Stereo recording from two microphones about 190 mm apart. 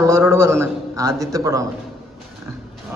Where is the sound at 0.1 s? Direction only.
15° right (ahead or behind).